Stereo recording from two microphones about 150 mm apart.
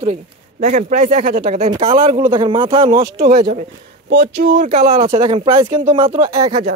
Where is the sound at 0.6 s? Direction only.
55° right (ahead or behind).